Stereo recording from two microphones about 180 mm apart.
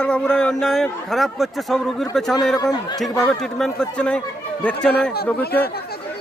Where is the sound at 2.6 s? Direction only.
20° left (ahead or behind).